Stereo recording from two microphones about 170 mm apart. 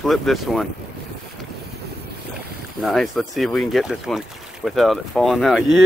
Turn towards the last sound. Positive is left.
turn(degrees=0)  # may be behind; listen again after turning